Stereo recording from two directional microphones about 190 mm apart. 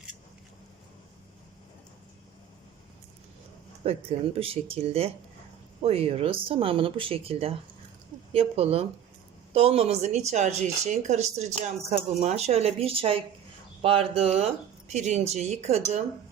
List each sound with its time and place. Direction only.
3.8 s speech: 30° right (ahead or behind)